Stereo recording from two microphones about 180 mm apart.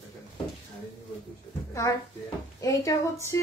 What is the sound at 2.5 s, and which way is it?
Speech, 20° left (ahead or behind).